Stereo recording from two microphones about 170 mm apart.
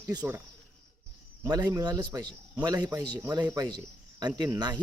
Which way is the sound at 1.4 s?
25° right (ahead or behind).